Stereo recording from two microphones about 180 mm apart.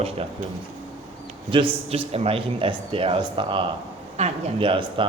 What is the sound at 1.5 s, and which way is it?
A man's voice, 30° right (ahead or behind).